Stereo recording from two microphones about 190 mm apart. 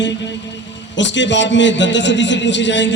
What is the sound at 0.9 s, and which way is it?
A man's voice, 70° left (ahead or behind).